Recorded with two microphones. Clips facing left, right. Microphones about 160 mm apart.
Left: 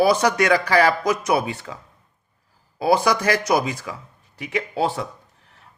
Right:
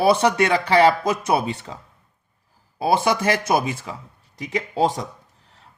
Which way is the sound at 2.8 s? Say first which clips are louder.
Left 1 dB; 25° right (ahead or behind).